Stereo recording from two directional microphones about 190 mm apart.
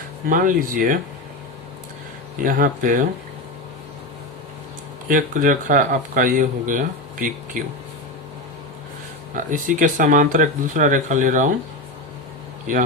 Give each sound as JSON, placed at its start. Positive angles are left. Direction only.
{"t": 0.3, "sound": "speech", "side_deg": -45}
{"t": 2.4, "sound": "speech", "side_deg": -45}
{"t": 5.0, "sound": "speech", "side_deg": -45}
{"t": 9.3, "sound": "speech", "side_deg": -45}